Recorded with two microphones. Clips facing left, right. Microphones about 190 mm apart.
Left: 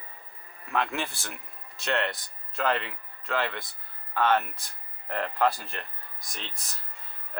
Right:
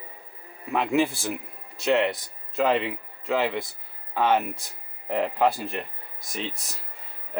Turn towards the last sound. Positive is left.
turn(degrees=0)  # may be behind; listen again after turning